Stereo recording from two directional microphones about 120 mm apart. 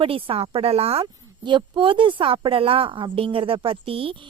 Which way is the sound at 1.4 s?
40° right (ahead or behind).